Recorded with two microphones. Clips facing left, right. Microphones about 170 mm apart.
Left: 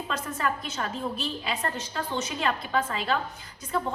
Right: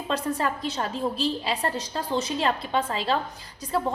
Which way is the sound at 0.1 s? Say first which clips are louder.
Right 5 dB; 35° right (ahead or behind).